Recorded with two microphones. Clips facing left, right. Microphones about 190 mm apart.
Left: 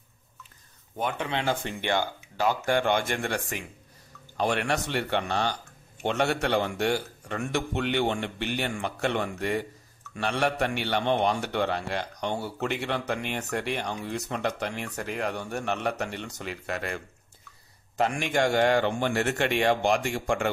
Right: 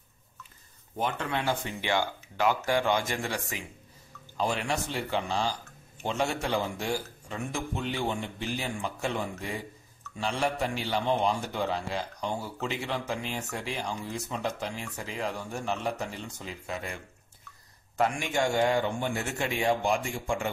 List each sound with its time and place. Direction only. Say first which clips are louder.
1.1 s speech: left 1 dB; 15° left (ahead or behind)
1.8 s speech: left 1 dB; 50° left (ahead or behind)
18.2 s speech: left 5 dB; 65° left (ahead or behind)